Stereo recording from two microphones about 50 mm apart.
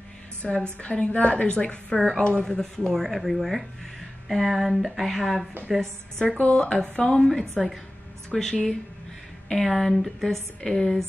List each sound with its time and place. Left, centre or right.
0.4 s a woman's voice: centre
2.0 s speech: centre
2.2 s a woman's voice: centre
6.2 s a woman's voice: left
6.6 s a woman's voice: centre